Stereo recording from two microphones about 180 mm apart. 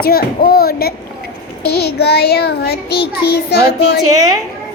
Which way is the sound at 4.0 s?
20° right (ahead or behind).